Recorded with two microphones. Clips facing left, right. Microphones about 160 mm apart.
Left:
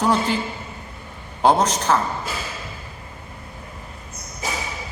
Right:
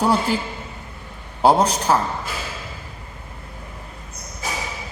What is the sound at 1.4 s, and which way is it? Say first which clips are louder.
Speech: right 1 dB; 10° right (ahead or behind).